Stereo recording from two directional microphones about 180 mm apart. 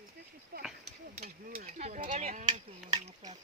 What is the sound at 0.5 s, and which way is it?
Speech, 60° right (ahead or behind).